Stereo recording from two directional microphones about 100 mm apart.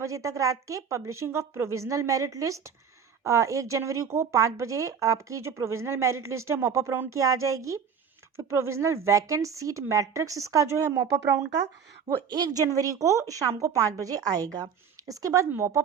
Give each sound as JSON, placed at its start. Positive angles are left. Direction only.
{"t": 0.0, "sound": "speech", "side_deg": -30}